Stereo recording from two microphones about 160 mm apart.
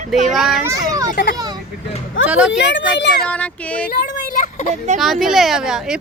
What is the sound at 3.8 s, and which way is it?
Speech, 65° left (ahead or behind).